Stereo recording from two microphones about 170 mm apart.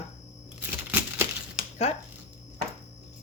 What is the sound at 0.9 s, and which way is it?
Crumpling, 10° right (ahead or behind).